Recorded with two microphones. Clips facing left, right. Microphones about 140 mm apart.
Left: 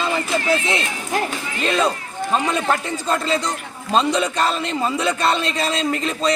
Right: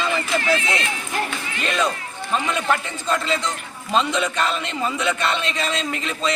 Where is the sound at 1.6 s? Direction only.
35° left (ahead or behind).